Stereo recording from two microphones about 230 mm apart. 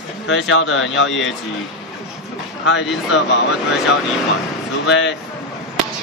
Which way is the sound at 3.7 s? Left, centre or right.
Centre.